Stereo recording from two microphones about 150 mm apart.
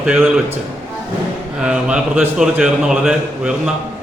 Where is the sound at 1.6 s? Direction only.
5° right (ahead or behind).